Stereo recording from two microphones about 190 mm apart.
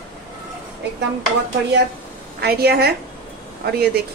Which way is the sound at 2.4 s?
55° right (ahead or behind).